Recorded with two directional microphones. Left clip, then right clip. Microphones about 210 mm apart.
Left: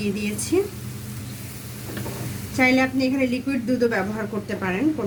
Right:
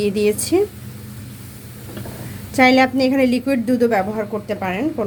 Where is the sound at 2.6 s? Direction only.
40° right (ahead or behind).